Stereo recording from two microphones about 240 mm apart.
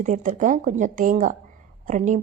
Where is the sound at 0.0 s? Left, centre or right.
Right.